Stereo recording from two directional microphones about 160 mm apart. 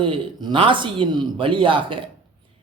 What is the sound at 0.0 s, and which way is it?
Speech, 30° right (ahead or behind).